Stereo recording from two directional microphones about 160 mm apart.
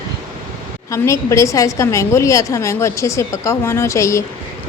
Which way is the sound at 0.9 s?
20° left (ahead or behind).